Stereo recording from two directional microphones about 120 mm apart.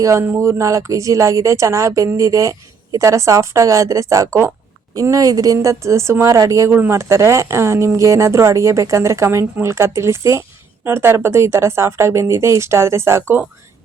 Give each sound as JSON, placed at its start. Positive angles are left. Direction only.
{"t": 0.0, "sound": "speech", "side_deg": -25}